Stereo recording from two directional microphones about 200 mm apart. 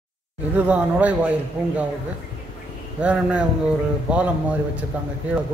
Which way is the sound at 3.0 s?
5° right (ahead or behind).